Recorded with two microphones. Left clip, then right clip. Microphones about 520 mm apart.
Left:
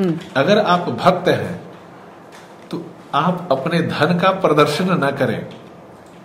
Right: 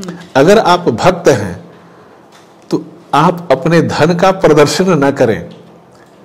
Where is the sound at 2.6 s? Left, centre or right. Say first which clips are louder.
Right 12 dB; right.